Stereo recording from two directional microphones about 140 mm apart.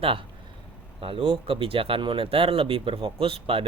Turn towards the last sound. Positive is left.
turn(degrees=-40)  # may be behind; listen again after turning